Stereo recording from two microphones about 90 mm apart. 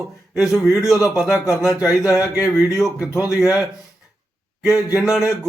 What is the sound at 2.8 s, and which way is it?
Speech, 5° right (ahead or behind).